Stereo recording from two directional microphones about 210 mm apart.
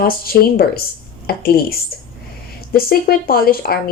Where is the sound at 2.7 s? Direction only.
45° left (ahead or behind).